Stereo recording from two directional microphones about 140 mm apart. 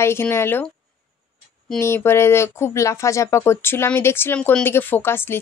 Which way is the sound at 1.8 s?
15° left (ahead or behind).